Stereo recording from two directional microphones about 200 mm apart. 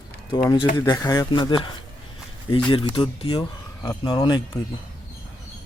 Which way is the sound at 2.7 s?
25° left (ahead or behind).